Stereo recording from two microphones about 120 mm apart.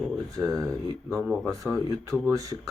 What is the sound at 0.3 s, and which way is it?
Speech, 30° right (ahead or behind).